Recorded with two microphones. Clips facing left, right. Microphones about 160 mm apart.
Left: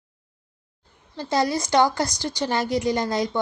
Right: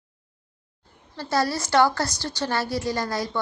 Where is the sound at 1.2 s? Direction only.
15° left (ahead or behind).